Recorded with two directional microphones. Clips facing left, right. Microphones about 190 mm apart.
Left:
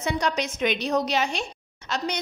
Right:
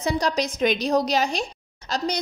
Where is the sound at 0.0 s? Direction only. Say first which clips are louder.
Right 2 dB; 35° right (ahead or behind).